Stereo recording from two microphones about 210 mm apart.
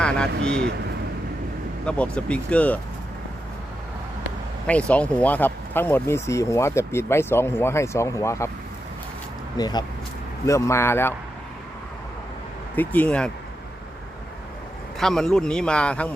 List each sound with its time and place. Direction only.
1.8 s speech: 5° left (ahead or behind)
4.6 s speech: 5° left (ahead or behind)
9.6 s speech: 20° left (ahead or behind)
12.7 s speech: 10° left (ahead or behind)
14.9 s speech: centre (ahead or behind)